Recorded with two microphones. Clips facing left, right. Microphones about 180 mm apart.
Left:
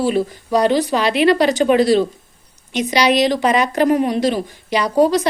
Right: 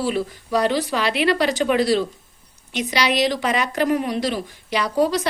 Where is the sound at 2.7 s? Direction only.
Centre (ahead or behind).